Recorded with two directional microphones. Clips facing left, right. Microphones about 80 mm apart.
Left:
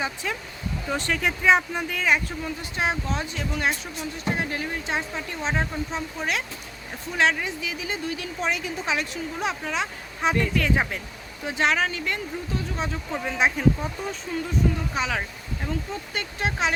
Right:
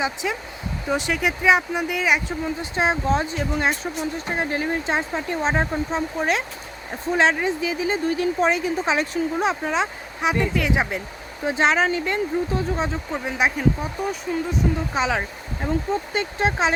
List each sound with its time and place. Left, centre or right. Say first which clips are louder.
0.0 s a woman's voice: right 4 dB; centre
10.2 s speech: right 2 dB; centre
11.4 s speech: right 4 dB; right
13.4 s speech: even; centre
14.5 s speech: left 1 dB; right